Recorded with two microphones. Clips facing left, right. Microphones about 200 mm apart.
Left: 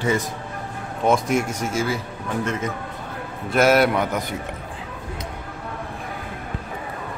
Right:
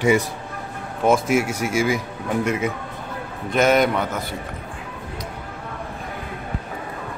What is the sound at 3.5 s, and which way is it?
Speech, 5° left (ahead or behind).